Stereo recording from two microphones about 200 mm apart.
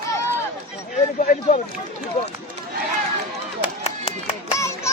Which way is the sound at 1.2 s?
40° left (ahead or behind).